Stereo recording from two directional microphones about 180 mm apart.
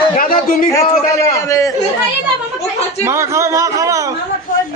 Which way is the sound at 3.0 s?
15° right (ahead or behind).